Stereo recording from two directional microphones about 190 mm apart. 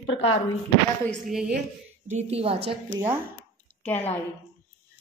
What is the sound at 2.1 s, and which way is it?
Speech, 35° right (ahead or behind).